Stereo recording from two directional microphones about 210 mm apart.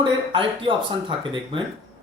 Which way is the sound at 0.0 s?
25° right (ahead or behind).